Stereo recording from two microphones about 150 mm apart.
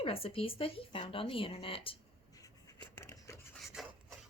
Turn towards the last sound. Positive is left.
turn(degrees=0)  # may be behind; listen again after turning